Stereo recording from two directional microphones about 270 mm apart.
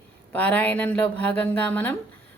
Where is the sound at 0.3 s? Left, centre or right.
Centre.